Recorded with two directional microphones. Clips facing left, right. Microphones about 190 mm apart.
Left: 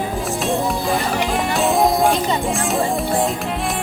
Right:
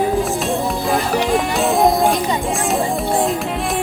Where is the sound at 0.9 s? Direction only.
Centre (ahead or behind).